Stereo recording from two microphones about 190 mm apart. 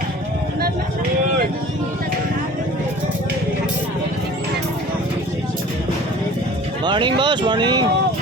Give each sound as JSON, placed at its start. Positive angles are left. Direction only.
{"t": 6.8, "sound": "speech", "side_deg": -25}